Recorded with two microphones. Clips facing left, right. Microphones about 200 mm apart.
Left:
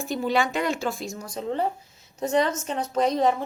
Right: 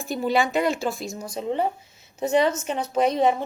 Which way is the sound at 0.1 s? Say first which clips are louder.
Right 2 dB; 5° right (ahead or behind).